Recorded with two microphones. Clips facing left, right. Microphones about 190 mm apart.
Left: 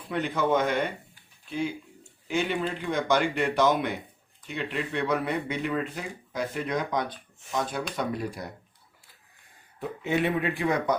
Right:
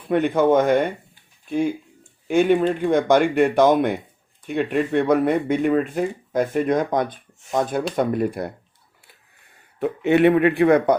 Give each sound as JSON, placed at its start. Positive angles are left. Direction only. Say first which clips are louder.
{"t": 0.1, "sound": "speech", "louder": "right 9 dB", "side_deg": -55}
{"t": 9.8, "sound": "speech", "louder": "right 11 dB", "side_deg": -65}